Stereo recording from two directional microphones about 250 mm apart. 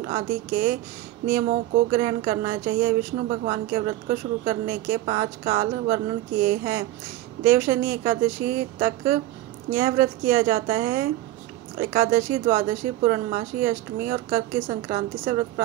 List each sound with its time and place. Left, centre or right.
0.0 s speech: right